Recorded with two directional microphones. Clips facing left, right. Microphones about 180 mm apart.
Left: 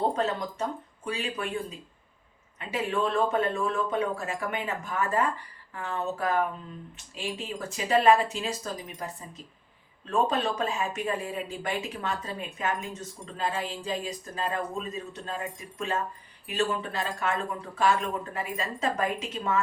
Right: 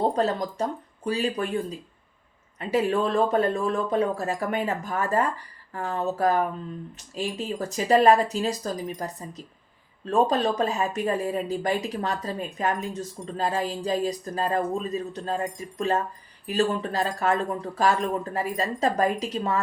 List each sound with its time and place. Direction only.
0.2 s speech: 35° right (ahead or behind)
2.6 s speech: 40° right (ahead or behind)